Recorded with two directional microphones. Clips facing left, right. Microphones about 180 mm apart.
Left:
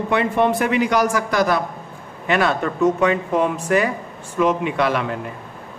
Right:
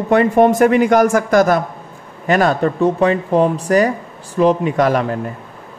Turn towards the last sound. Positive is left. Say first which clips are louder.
# right 5 dB
turn(degrees=-40)  # may be behind; listen again after turning